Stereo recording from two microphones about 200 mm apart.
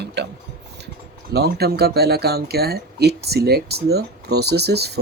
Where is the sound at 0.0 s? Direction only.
60° right (ahead or behind).